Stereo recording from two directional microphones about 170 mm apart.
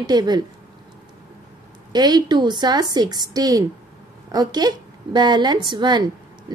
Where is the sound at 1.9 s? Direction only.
25° right (ahead or behind).